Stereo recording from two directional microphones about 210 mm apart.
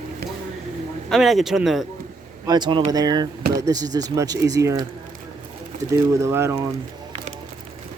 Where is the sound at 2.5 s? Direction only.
20° right (ahead or behind).